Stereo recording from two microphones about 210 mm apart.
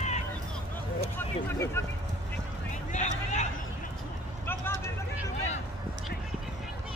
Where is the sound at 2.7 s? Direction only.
35° left (ahead or behind).